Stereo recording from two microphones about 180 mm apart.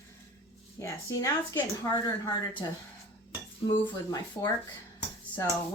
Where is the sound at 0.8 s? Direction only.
15° left (ahead or behind).